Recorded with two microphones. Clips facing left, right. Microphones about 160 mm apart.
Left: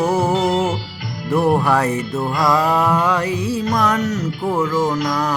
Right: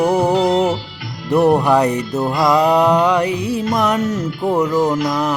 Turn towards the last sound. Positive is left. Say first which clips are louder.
# right 2 dB
turn(degrees=-20)  # may be behind; listen again after turning